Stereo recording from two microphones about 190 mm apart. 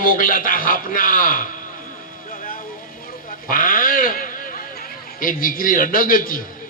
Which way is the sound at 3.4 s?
45° left (ahead or behind).